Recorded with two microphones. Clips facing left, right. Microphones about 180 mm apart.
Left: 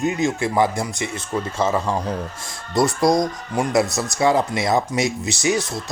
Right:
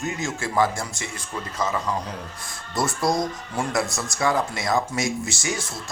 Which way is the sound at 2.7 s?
15° left (ahead or behind).